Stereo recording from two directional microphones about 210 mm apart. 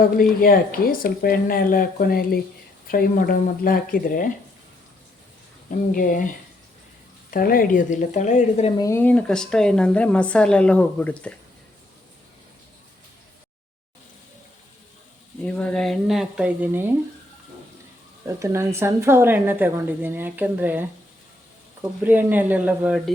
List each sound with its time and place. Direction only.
0.2 s speech: 45° left (ahead or behind)
5.7 s a woman's voice: 40° left (ahead or behind)
7.3 s a woman's voice: 45° left (ahead or behind)
8.8 s a woman's voice: 10° left (ahead or behind)
15.4 s a woman's voice: 5° left (ahead or behind)
18.3 s a woman's voice: 15° right (ahead or behind)